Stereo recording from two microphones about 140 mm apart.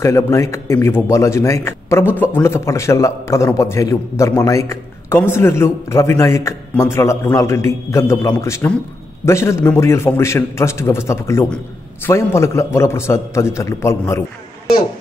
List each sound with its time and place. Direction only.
0.0 s a man's voice: 20° left (ahead or behind)